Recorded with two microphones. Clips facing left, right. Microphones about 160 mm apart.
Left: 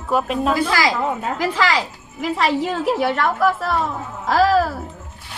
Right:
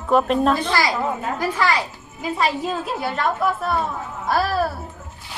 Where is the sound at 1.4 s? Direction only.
90° left.